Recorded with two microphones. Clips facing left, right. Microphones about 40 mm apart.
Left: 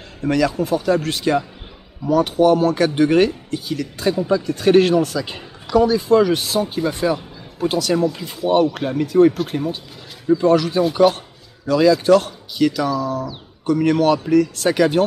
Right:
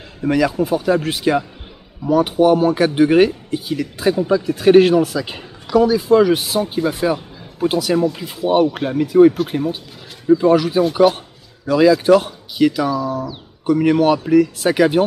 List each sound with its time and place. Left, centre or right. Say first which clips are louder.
0.2 s speech: right 2 dB; centre